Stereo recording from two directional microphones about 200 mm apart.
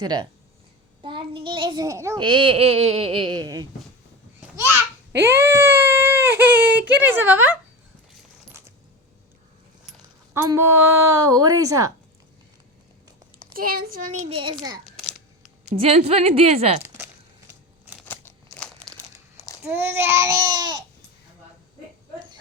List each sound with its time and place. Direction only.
0.0 s a child's voice: 20° right (ahead or behind)
5.2 s baby cry: 10° right (ahead or behind)
10.3 s a woman's voice: 15° right (ahead or behind)
13.5 s a child's voice: 45° right (ahead or behind)
14.3 s a child's voice: 25° right (ahead or behind)
15.7 s speech: 30° right (ahead or behind)
18.0 s crumpling: 10° left (ahead or behind)
19.6 s a woman's voice: 10° right (ahead or behind)